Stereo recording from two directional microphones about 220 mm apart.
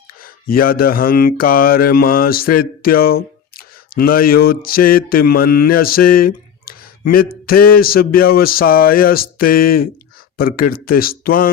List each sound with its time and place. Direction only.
0.4 s speech: 40° left (ahead or behind)